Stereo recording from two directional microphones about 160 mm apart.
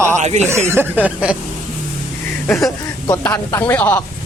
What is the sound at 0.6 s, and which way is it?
Speech, 15° right (ahead or behind).